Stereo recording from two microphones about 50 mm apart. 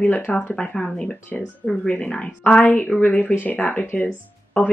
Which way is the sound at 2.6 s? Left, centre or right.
Left.